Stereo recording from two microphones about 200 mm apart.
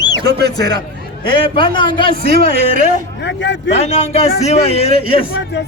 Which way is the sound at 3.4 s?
60° left (ahead or behind).